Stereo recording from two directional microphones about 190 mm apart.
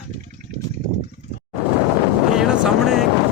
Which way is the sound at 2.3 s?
5° right (ahead or behind).